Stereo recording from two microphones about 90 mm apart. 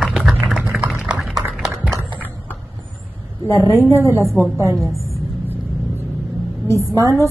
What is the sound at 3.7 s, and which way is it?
Speech, 25° right (ahead or behind).